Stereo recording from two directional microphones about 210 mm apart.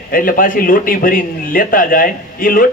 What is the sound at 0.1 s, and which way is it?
A man's voice, 40° left (ahead or behind).